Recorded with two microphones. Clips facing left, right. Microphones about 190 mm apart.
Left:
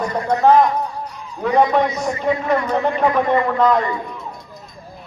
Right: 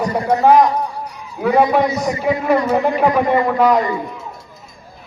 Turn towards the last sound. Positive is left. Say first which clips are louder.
# right 2 dB
turn(degrees=-10)  # may be behind; listen again after turning